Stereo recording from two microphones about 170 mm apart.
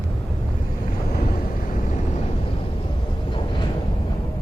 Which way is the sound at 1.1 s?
60° left (ahead or behind).